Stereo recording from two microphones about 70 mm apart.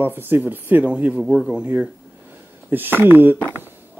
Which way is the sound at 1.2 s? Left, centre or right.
Centre.